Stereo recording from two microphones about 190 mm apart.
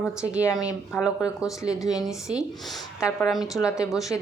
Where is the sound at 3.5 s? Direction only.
15° left (ahead or behind).